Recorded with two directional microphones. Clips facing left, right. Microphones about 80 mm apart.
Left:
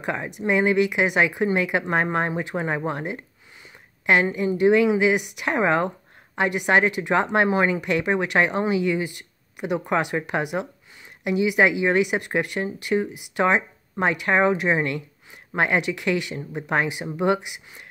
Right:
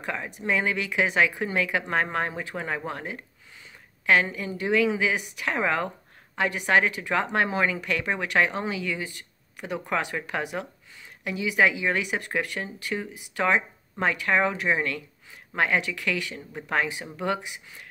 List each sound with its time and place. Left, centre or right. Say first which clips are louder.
0.0 s speech: left 5 dB; left